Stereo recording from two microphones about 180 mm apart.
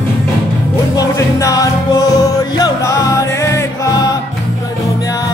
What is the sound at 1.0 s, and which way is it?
Music, 20° left (ahead or behind).